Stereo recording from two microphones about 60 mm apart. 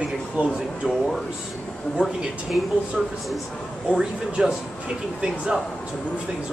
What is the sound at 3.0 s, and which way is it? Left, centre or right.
Speech, centre.